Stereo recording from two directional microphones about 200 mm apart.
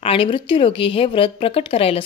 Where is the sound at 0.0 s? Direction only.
25° left (ahead or behind).